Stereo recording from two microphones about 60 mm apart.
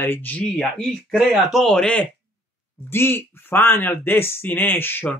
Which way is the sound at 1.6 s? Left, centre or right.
Centre.